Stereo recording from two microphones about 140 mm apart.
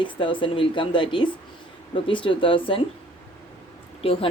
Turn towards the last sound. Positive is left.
turn(degrees=40)  # may be behind; listen again after turning